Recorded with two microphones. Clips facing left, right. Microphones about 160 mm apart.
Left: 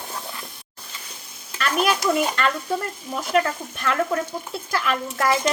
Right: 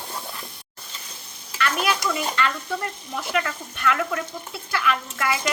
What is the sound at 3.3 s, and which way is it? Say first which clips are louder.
Speech: left 6 dB; 40° left (ahead or behind).